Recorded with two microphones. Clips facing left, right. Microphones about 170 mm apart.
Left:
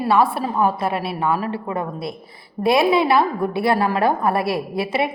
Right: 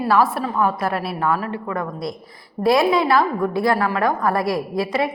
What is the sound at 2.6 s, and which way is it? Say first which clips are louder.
A woman's voice: even; 20° left (ahead or behind).